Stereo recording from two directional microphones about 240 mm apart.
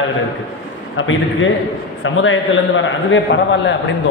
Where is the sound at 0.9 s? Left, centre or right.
Left.